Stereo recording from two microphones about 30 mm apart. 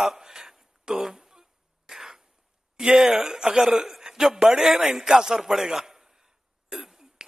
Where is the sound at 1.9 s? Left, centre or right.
Centre.